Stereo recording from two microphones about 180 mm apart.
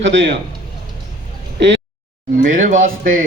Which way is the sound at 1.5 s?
80° right.